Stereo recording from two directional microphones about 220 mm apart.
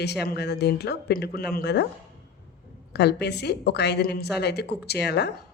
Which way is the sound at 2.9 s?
50° left (ahead or behind).